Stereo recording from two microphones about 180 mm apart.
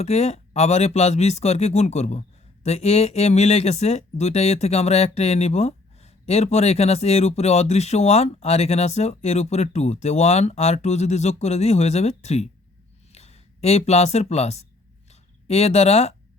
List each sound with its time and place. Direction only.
0.0 s speech: 35° left (ahead or behind)